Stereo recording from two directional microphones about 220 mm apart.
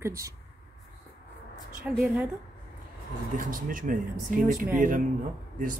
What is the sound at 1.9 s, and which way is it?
Speech, 5° right (ahead or behind).